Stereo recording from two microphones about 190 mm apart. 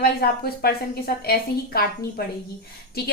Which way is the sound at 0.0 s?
55° left (ahead or behind).